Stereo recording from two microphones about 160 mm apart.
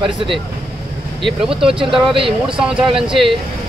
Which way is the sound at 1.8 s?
35° right (ahead or behind).